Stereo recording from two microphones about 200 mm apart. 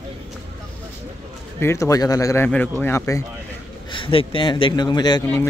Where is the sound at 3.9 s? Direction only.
25° left (ahead or behind).